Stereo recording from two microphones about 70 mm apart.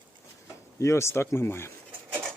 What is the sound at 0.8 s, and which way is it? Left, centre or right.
Speech, left.